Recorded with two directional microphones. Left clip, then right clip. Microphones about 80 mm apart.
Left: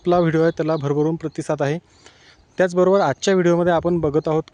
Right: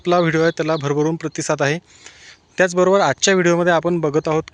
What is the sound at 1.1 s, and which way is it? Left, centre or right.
Speech, centre.